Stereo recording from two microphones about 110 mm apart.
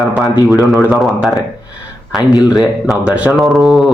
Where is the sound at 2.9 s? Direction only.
10° right (ahead or behind).